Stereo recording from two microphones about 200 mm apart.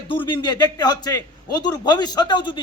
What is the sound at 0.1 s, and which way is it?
A man's voice, 25° left (ahead or behind).